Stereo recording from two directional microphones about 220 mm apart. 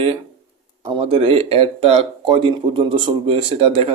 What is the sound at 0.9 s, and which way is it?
Speech, 25° right (ahead or behind).